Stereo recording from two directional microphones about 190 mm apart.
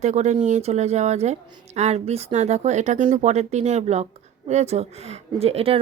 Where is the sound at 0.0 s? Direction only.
35° right (ahead or behind).